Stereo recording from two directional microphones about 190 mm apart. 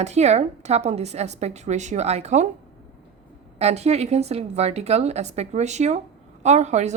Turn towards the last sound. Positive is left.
turn(degrees=-35)  # may be behind; listen again after turning